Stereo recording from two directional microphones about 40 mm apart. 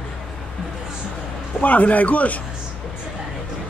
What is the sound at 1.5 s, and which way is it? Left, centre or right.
Speech, left.